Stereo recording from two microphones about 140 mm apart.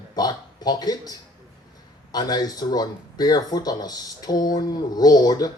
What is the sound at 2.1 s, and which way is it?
A man's voice, 30° left (ahead or behind).